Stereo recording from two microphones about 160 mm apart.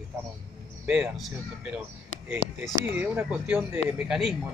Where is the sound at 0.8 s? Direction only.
5° right (ahead or behind).